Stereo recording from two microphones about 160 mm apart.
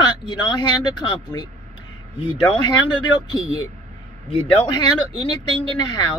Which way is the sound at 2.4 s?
25° left (ahead or behind).